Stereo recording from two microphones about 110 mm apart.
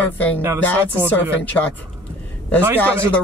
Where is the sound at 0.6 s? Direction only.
15° left (ahead or behind).